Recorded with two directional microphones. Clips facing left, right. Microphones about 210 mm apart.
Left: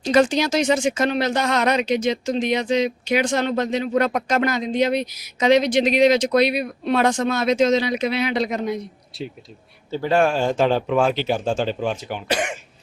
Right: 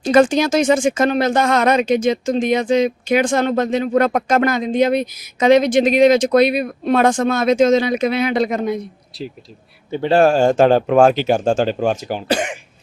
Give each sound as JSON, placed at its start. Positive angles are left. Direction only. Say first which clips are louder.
{"t": 0.0, "sound": "speech", "louder": "right 4 dB", "side_deg": -50}
{"t": 9.1, "sound": "speech", "louder": "right 2 dB", "side_deg": 0}
{"t": 9.9, "sound": "speech", "louder": "right 5 dB", "side_deg": -30}